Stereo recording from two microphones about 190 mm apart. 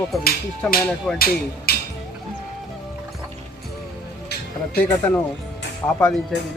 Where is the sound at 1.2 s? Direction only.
55° left (ahead or behind).